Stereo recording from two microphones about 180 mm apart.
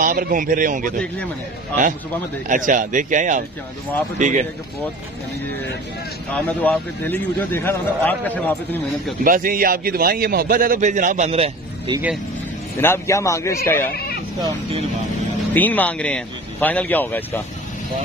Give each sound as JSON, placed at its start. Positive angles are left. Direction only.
{"t": 0.0, "sound": "a man's voice", "side_deg": -50}
{"t": 2.4, "sound": "a man's voice", "side_deg": -45}
{"t": 6.3, "sound": "a man's voice", "side_deg": 5}
{"t": 9.2, "sound": "a man's voice", "side_deg": -50}
{"t": 12.7, "sound": "a man's voice", "side_deg": 15}
{"t": 14.4, "sound": "speech", "side_deg": -35}
{"t": 15.5, "sound": "a man's voice", "side_deg": 10}